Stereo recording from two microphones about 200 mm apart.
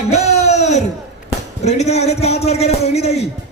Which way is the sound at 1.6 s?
35° left (ahead or behind).